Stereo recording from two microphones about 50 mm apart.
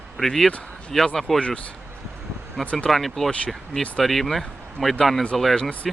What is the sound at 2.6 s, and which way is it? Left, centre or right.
Speech, left.